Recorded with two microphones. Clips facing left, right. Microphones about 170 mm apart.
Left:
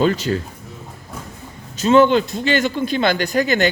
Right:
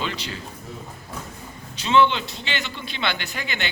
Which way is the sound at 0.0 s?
45° left (ahead or behind).